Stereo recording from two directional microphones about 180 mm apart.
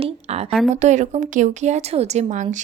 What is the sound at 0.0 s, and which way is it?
A woman's voice, 35° right (ahead or behind).